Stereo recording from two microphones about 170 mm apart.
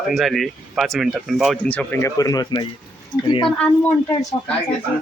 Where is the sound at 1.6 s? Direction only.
10° left (ahead or behind); by 3.5 s 30° left (ahead or behind).